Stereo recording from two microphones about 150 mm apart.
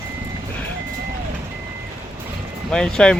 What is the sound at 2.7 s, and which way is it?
Speech, 5° left (ahead or behind).